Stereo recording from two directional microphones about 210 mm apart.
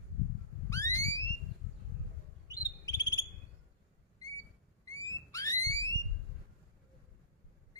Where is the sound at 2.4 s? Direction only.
15° left (ahead or behind).